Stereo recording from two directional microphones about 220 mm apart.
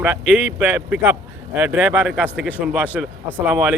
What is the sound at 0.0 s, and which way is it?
Speech, 10° right (ahead or behind).